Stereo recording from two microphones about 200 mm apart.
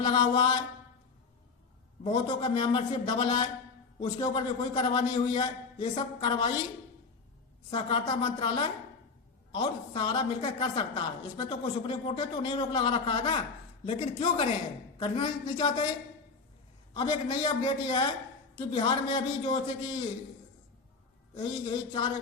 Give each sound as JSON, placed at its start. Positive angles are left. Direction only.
{"t": 0.0, "sound": "mantra", "side_deg": 25}
{"t": 2.0, "sound": "a woman's voice", "side_deg": 25}
{"t": 7.7, "sound": "a woman's voice", "side_deg": 30}
{"t": 16.9, "sound": "a woman's voice", "side_deg": 20}
{"t": 21.3, "sound": "a woman's voice", "side_deg": 25}